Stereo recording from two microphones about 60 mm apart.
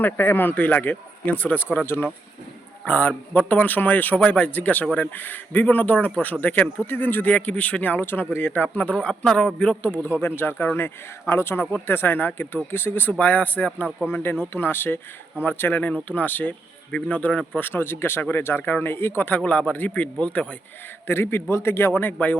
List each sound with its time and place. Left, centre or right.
0.0 s a man's voice: left
9.9 s speech: left
14.1 s speech: left
17.6 s speech: left
19.5 s speech: left
21.1 s a man's voice: left